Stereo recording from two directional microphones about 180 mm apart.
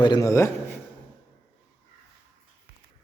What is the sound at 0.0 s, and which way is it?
Speech, 20° left (ahead or behind).